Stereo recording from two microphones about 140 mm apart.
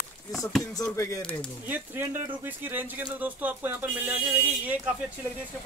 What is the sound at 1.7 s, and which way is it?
Speech, 15° right (ahead or behind).